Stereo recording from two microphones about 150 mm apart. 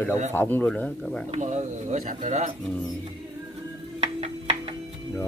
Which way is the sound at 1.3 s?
50° right (ahead or behind).